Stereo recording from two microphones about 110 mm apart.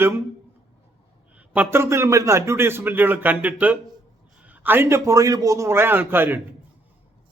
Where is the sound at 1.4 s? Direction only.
15° right (ahead or behind).